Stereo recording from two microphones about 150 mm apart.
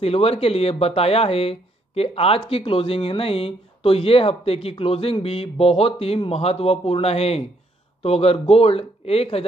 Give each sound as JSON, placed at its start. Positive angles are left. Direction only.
{"t": 0.0, "sound": "speech", "side_deg": 40}